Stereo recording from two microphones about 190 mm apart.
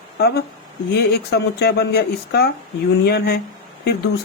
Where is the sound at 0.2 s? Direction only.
60° left (ahead or behind).